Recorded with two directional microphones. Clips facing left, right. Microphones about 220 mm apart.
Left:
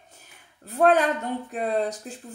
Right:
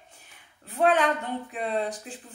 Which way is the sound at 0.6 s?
40° left (ahead or behind).